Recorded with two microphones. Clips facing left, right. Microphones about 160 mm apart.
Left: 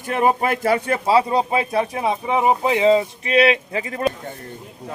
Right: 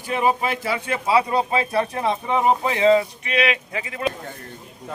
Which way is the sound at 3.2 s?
35° left (ahead or behind).